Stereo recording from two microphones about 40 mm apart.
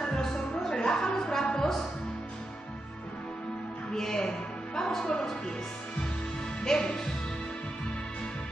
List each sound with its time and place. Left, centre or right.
0.0 s music: centre
0.7 s a sound: left
3.9 s music: centre
6.6 s music: centre